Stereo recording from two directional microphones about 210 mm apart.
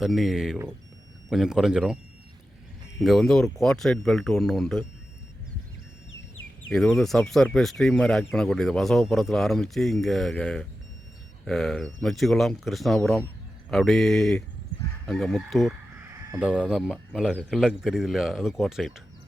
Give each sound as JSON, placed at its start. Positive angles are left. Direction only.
{"t": 0.0, "sound": "speech", "side_deg": 0}
{"t": 3.0, "sound": "speech", "side_deg": 0}
{"t": 6.1, "sound": "a sound", "side_deg": 70}
{"t": 6.7, "sound": "speech", "side_deg": 5}